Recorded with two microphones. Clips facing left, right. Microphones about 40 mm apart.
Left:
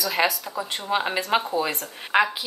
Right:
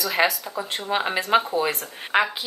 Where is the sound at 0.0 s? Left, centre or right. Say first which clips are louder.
Right 1 dB; centre.